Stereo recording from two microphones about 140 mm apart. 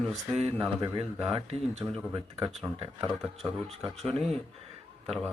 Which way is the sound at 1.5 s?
45° right (ahead or behind).